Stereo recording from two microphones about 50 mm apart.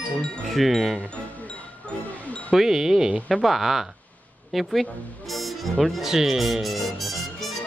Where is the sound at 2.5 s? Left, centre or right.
Centre.